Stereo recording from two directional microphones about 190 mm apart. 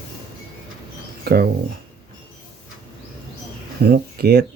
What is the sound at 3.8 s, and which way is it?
Speech, 55° right (ahead or behind).